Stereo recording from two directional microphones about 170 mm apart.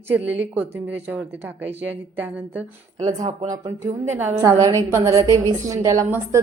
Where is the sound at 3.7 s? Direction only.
40° right (ahead or behind).